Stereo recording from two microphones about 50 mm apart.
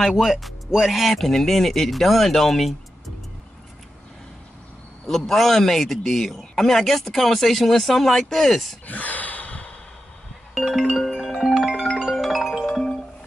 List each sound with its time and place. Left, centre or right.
0.1 s a man's voice: centre
5.0 s a man's voice: centre
8.8 s gasp: left
10.5 s music: centre
12.6 s music: centre